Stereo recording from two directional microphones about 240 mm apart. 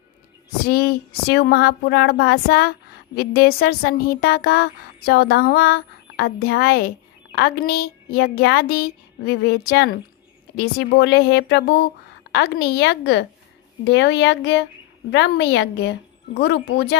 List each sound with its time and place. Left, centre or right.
0.7 s speech: left